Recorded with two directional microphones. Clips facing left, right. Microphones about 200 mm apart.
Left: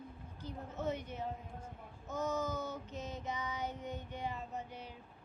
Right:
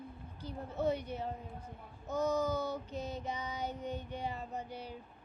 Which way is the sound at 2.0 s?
35° right (ahead or behind).